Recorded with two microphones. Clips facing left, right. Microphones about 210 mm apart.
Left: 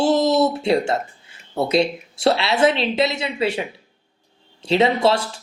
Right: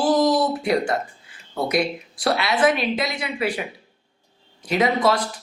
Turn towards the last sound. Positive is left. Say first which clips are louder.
# left 2 dB
turn(degrees=25)  # may be behind; listen again after turning